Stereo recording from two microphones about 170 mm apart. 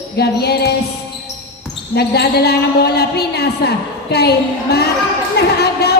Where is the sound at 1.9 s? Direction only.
70° left (ahead or behind).